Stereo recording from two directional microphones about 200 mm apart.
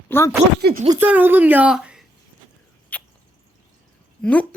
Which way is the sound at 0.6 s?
45° right (ahead or behind).